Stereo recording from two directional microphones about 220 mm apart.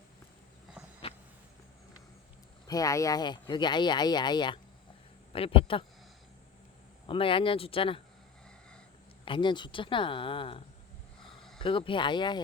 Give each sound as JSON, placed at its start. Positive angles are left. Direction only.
{"t": 2.6, "sound": "speech", "side_deg": 15}
{"t": 7.1, "sound": "speech", "side_deg": 25}
{"t": 9.2, "sound": "speech", "side_deg": 20}
{"t": 11.6, "sound": "speech", "side_deg": 25}